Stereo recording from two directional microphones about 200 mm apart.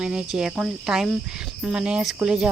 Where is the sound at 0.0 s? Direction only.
5° right (ahead or behind).